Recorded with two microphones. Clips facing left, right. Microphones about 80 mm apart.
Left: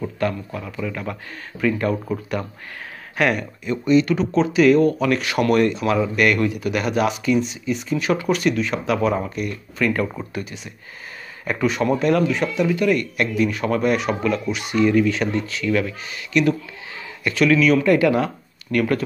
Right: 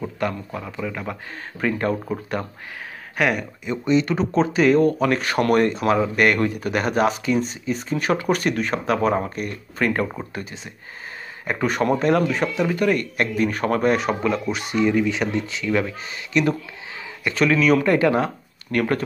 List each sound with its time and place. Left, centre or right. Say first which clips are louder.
0.0 s speech: left 2 dB; centre
1.6 s speech: left 2 dB; right
3.2 s speech: left 1 dB; centre; by 10.6 s right
11.6 s speech: left 1 dB; right
14.8 s speech: left 3 dB; centre; by 19.0 s right